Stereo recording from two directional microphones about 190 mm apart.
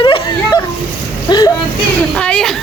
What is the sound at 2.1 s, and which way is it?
Speech, 5° left (ahead or behind).